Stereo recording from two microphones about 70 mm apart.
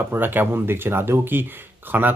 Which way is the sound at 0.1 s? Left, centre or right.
Right.